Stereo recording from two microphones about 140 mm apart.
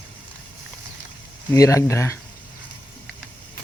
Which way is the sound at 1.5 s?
20° left (ahead or behind).